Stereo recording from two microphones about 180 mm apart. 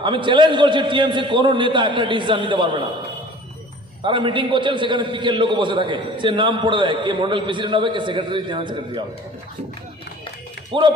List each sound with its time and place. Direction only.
0.0 s a man's voice: 25° right (ahead or behind)
4.0 s a man's voice: 25° right (ahead or behind)
10.7 s a man's voice: 30° right (ahead or behind)